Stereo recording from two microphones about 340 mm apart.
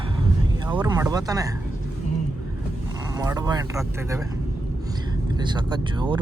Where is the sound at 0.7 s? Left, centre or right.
Centre.